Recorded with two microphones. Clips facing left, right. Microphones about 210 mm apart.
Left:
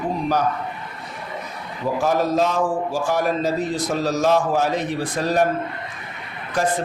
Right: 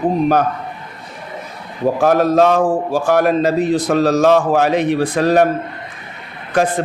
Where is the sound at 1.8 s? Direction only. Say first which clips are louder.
Right 7 dB; 60° right (ahead or behind).